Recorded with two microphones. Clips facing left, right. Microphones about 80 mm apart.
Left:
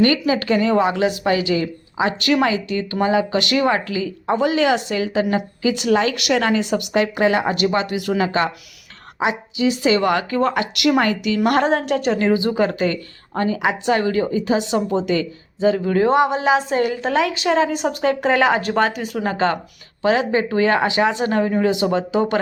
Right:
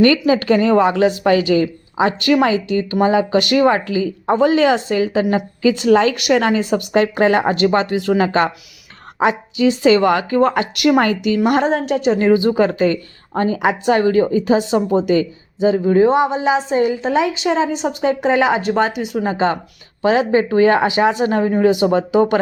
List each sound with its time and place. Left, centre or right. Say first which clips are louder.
0.0 s speech: right 4 dB; right
11.4 s a woman's voice: even; centre
12.2 s a woman's voice: right 4 dB; right
16.0 s a woman's voice: right 1 dB; centre
20.0 s a woman's voice: right 3 dB; right